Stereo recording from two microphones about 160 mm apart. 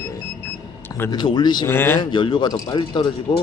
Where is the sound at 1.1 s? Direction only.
25° left (ahead or behind).